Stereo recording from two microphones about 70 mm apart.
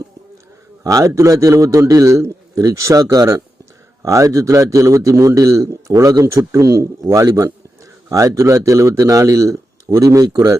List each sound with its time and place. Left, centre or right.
0.9 s speech: right